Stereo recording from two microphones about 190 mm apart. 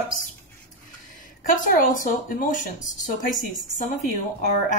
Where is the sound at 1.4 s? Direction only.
45° left (ahead or behind).